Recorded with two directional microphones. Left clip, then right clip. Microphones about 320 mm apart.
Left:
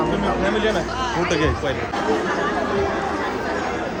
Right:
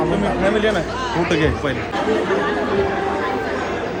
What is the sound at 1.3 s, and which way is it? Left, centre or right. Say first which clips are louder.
Speech: right 2 dB; centre.